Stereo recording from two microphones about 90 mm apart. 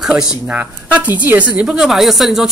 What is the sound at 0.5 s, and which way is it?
Speech, 20° right (ahead or behind).